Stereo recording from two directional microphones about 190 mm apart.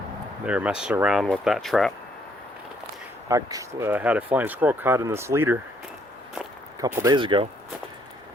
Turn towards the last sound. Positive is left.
turn(degrees=-25)  # may be behind; listen again after turning